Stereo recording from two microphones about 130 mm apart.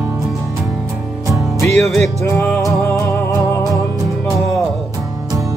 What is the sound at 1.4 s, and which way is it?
Music, centre (ahead or behind).